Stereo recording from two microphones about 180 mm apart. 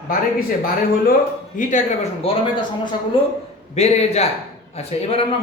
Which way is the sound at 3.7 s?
35° left (ahead or behind).